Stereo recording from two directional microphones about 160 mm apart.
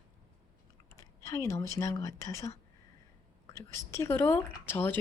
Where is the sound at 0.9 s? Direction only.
20° left (ahead or behind).